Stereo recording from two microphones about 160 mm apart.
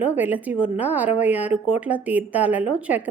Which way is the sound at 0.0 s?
10° right (ahead or behind).